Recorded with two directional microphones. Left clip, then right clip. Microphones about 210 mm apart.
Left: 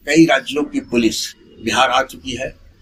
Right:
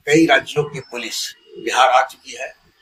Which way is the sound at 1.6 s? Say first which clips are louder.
Right 1 dB; 45° left (ahead or behind).